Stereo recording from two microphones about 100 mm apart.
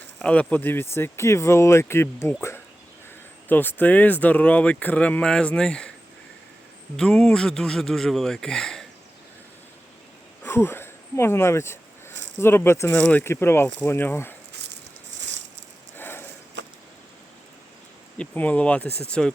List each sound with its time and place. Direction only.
0.2 s speech: 15° left (ahead or behind)
6.9 s speech: 5° left (ahead or behind)
10.4 s a sound: 25° left (ahead or behind)
13.0 s speech: 15° left (ahead or behind)
16.0 s a sound: 20° left (ahead or behind)
18.2 s speech: 15° left (ahead or behind)